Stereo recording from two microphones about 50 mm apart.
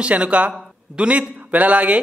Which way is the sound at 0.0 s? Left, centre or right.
Right.